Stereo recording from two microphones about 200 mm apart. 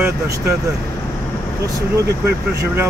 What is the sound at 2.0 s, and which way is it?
Speech, 55° right (ahead or behind).